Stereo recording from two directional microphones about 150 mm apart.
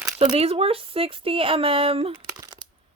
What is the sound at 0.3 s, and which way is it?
Speech, 40° right (ahead or behind).